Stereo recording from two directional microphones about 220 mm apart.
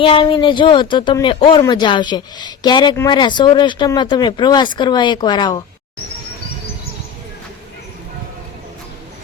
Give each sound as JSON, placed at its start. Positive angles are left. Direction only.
{"t": 0.0, "sound": "speech", "side_deg": 25}